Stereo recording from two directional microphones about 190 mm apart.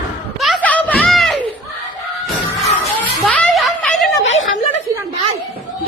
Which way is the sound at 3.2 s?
5° left (ahead or behind).